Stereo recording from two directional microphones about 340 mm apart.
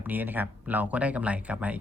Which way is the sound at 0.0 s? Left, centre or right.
Centre.